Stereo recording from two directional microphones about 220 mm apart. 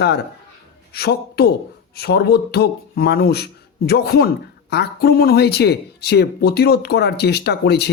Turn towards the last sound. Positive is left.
turn(degrees=50)  # may be behind; listen again after turning